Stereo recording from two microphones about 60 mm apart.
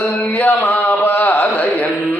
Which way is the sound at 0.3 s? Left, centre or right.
Left.